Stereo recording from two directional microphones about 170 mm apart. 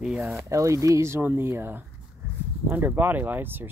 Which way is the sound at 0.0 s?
5° right (ahead or behind).